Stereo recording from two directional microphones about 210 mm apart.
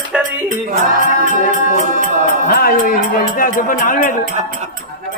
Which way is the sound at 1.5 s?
40° right (ahead or behind).